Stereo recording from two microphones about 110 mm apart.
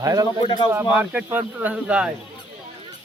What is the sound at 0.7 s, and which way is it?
Speech, 15° right (ahead or behind).